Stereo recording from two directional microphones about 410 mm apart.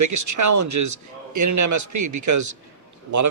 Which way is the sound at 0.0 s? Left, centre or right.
Right.